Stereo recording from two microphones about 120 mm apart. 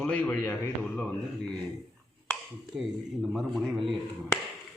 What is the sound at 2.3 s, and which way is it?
Speech, centre (ahead or behind).